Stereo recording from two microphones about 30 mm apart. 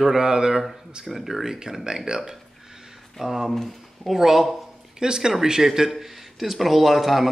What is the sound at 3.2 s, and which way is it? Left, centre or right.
Speech, centre.